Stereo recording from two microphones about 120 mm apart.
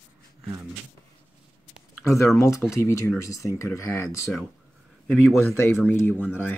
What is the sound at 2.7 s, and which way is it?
Speech, 20° left (ahead or behind).